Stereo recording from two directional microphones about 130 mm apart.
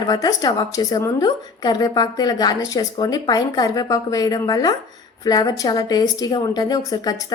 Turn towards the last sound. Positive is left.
turn(degrees=30)  # may be behind; listen again after turning